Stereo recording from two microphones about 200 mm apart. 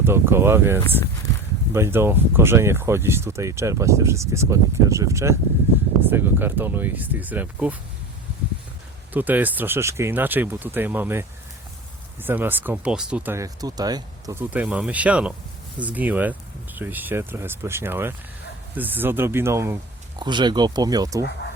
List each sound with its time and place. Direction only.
0.0 s speech: 10° right (ahead or behind)
9.1 s speech: 10° right (ahead or behind)